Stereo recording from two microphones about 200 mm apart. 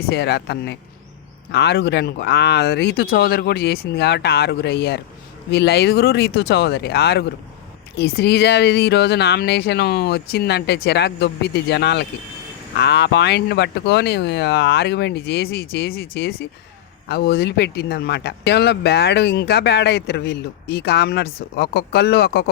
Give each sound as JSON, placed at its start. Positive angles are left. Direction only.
{"t": 0.1, "sound": "speech", "side_deg": 55}